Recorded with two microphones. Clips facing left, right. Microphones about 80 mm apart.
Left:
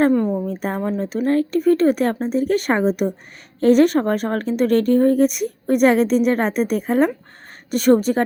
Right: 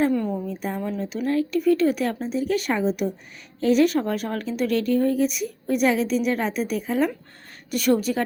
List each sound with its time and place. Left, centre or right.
0.1 s a woman's voice: left
0.4 s a woman's voice: left
0.8 s a woman's voice: left